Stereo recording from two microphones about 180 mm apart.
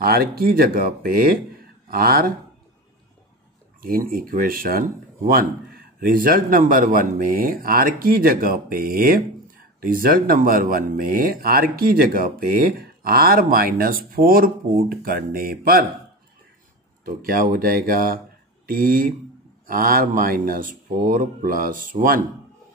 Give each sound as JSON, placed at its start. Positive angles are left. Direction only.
{"t": 0.0, "sound": "speech", "side_deg": -55}
{"t": 3.8, "sound": "speech", "side_deg": -55}
{"t": 17.0, "sound": "speech", "side_deg": -55}